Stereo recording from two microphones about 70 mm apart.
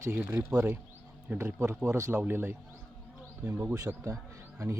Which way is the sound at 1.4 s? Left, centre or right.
Right.